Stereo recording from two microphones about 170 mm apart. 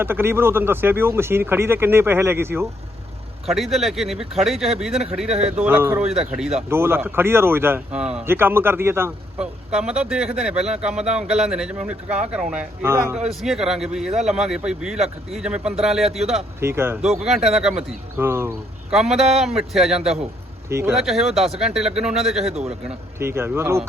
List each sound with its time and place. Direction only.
0.0 s speech: 15° right (ahead or behind)
3.4 s speech: centre (ahead or behind)
13.2 s speech: centre (ahead or behind)
16.6 s speech: 15° right (ahead or behind)
17.2 s speech: centre (ahead or behind)
18.9 s speech: centre (ahead or behind)
20.7 s speech: 15° right (ahead or behind)
20.9 s speech: centre (ahead or behind)
23.2 s speech: 15° right (ahead or behind)